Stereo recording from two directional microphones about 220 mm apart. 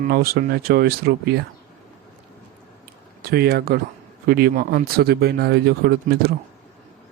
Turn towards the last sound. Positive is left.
turn(degrees=-45)  # may be behind; listen again after turning